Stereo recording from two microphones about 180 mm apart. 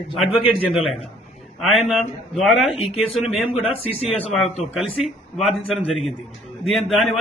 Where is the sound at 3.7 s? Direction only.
35° left (ahead or behind).